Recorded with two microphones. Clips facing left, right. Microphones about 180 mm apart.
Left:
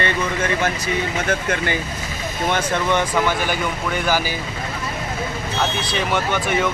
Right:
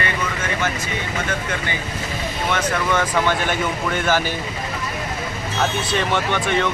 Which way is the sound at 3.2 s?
5° left (ahead or behind).